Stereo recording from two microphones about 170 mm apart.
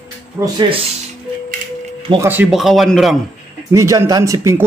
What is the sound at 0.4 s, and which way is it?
Speech, 30° right (ahead or behind).